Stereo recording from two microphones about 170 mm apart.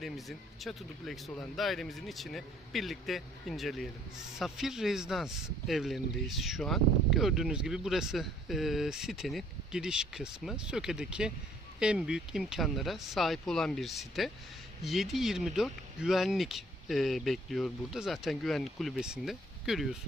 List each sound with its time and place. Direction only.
0.0 s speech: centre (ahead or behind)